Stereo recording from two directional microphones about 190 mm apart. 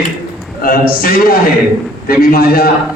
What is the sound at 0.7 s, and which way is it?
A man's voice, 50° left (ahead or behind).